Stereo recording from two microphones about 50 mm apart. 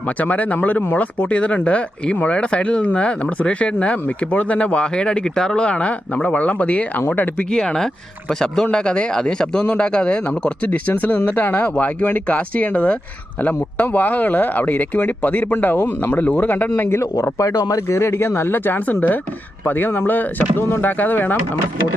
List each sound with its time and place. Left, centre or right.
0.2 s speech: left
7.5 s speech: centre
10.7 s speech: left
16.2 s speech: left
17.3 s speech: left